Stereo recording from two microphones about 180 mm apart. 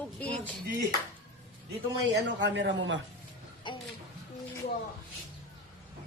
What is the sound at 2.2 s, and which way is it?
Speech, 85° right.